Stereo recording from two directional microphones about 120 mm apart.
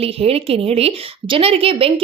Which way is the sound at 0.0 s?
55° right (ahead or behind).